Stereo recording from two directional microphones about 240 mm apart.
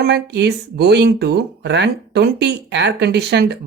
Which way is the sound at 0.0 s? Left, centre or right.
Right.